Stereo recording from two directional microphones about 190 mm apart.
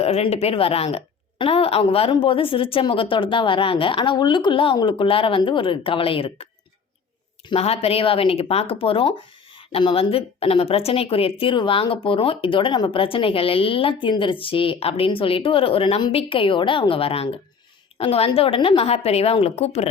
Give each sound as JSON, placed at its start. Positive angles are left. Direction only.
{"t": 0.0, "sound": "a woman's voice", "side_deg": 35}
{"t": 7.5, "sound": "a woman's voice", "side_deg": 35}